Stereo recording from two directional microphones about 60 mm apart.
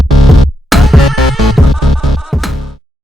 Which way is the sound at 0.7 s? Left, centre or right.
Centre.